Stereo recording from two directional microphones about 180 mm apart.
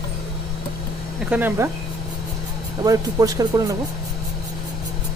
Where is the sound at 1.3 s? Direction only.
10° right (ahead or behind).